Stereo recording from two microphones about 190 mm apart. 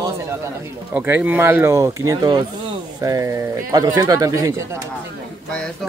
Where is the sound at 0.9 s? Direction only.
10° right (ahead or behind).